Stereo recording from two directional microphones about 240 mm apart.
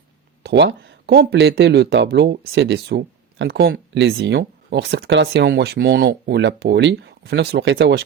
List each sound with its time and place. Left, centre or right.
0.4 s speech: right